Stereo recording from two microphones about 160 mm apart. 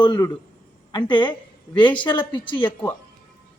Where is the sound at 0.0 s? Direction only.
25° left (ahead or behind).